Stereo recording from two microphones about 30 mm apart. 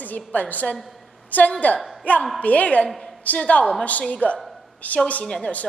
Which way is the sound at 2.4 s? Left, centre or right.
Left.